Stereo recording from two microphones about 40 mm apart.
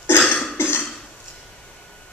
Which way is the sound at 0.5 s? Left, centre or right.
Left.